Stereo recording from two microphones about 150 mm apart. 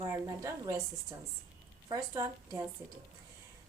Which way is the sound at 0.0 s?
20° right (ahead or behind).